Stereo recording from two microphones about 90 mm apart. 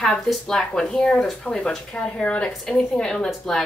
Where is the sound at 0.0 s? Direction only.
5° left (ahead or behind).